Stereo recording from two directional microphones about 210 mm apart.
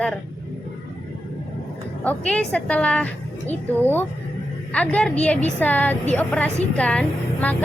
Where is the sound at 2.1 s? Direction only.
5° left (ahead or behind).